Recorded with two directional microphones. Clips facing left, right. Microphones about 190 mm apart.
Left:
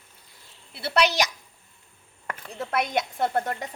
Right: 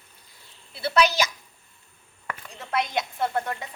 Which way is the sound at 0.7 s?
65° left (ahead or behind).